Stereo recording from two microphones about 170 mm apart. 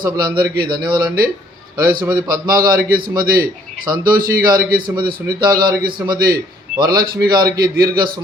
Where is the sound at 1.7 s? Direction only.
60° right (ahead or behind).